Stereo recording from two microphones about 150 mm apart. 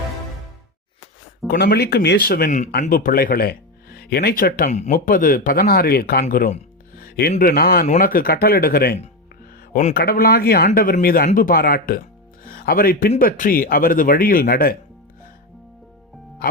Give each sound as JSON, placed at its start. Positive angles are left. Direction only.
{"t": 1.5, "sound": "speech", "side_deg": 90}
{"t": 2.8, "sound": "speech", "side_deg": 70}
{"t": 4.7, "sound": "speech", "side_deg": 55}
{"t": 7.9, "sound": "speech", "side_deg": 70}
{"t": 10.8, "sound": "speech", "side_deg": 70}